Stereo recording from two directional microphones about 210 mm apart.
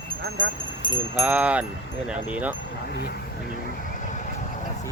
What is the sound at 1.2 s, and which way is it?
Wind chime, 5° right (ahead or behind).